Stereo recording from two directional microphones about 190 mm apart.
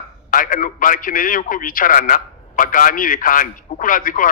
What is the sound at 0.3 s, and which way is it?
A man's voice, 45° left (ahead or behind).